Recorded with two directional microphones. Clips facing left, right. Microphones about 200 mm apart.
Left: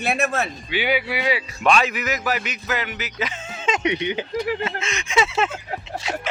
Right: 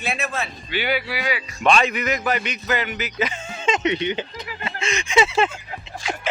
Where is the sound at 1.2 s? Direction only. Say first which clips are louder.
Left 3 dB; 25° left (ahead or behind).